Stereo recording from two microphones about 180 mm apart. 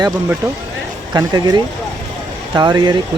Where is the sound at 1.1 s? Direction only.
25° right (ahead or behind).